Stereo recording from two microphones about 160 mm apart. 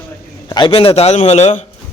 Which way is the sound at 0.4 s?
30° left (ahead or behind).